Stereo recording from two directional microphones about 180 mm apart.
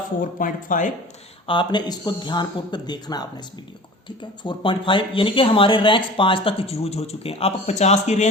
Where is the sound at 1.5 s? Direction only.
25° left (ahead or behind).